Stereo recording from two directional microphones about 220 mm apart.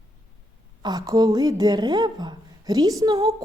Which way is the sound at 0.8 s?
20° right (ahead or behind).